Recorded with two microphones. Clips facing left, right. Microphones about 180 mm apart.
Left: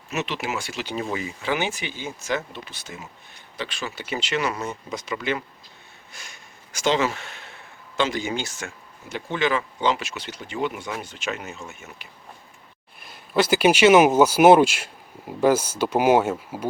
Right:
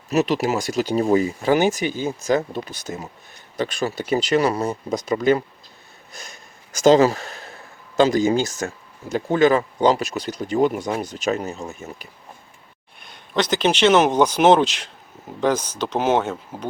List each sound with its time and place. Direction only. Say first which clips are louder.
0.1 s speech: right 9 dB; 35° right (ahead or behind)
13.0 s speech: left 1 dB; 5° left (ahead or behind)